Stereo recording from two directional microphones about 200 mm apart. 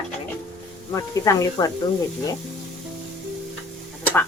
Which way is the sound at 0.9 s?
15° left (ahead or behind).